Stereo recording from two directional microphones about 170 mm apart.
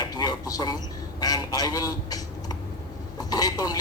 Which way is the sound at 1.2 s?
20° left (ahead or behind).